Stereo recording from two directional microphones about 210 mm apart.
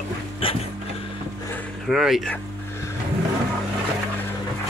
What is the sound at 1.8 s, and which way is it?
Speech, centre (ahead or behind).